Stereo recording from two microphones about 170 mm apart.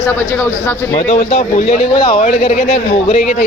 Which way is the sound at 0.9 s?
40° left (ahead or behind).